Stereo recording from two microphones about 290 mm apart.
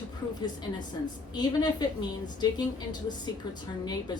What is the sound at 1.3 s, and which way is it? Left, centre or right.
A woman's voice, centre.